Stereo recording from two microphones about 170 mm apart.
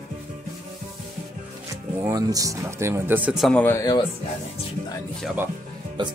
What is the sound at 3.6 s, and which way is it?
Speech, 15° left (ahead or behind).